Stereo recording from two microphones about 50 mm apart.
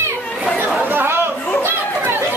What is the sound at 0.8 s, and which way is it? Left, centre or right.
Chatter, right.